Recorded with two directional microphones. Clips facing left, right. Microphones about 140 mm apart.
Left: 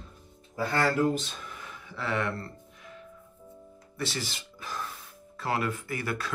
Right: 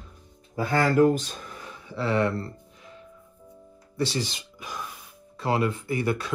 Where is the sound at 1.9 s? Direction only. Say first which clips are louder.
Right 6 dB; 30° right (ahead or behind).